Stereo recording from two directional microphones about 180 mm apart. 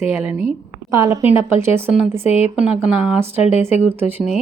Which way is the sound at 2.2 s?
35° left (ahead or behind).